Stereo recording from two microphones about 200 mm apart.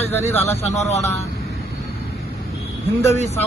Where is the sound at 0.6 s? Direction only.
35° left (ahead or behind).